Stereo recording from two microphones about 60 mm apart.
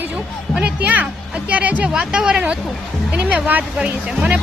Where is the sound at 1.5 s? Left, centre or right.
Right.